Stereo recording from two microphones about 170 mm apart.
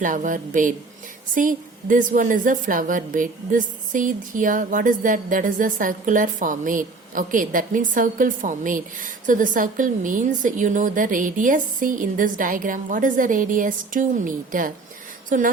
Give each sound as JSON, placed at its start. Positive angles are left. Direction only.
{"t": 0.0, "sound": "a woman's voice", "side_deg": -50}